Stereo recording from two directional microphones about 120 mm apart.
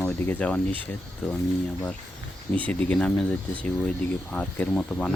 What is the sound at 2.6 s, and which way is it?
Speech, 10° left (ahead or behind).